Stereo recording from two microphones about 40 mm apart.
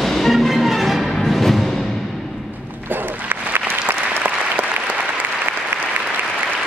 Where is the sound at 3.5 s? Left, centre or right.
Right.